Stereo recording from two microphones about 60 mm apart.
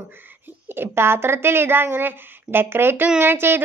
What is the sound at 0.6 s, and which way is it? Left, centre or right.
A woman's voice, right.